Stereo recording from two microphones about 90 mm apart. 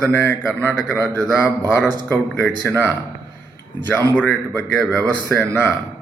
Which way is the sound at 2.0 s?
20° left (ahead or behind).